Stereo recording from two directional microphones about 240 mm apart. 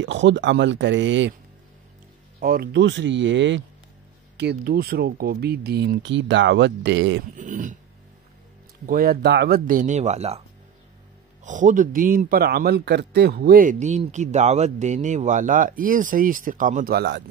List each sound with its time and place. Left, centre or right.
0.0 s speech: right
2.4 s speech: right
7.3 s throat clearing: right
8.8 s a man's voice: right
11.4 s a man's voice: right